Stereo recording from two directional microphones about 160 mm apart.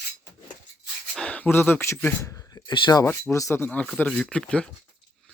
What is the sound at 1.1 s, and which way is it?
Speech, 10° left (ahead or behind).